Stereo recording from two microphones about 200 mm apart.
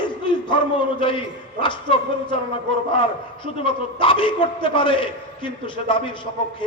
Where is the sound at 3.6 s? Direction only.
25° left (ahead or behind).